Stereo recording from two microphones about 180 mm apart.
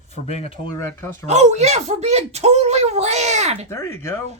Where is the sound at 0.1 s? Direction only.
35° left (ahead or behind).